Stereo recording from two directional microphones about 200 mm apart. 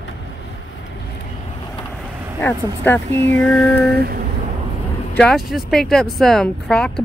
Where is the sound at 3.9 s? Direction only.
50° right (ahead or behind).